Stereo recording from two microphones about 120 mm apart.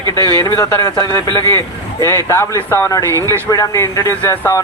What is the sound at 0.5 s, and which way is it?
Speech, 25° left (ahead or behind).